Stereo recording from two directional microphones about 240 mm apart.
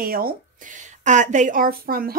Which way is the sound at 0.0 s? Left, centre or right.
Right.